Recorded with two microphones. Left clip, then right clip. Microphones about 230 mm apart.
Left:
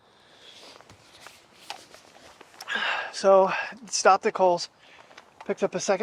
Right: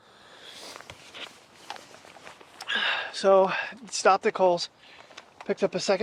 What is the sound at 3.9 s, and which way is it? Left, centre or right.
Speech, left.